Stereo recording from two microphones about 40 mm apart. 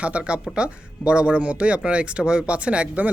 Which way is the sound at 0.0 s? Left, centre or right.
Right.